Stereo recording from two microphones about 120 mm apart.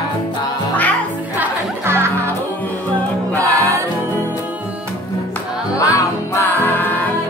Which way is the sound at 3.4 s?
25° right (ahead or behind).